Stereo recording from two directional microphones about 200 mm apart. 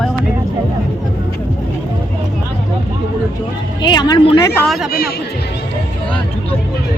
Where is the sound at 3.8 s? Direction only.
20° left (ahead or behind).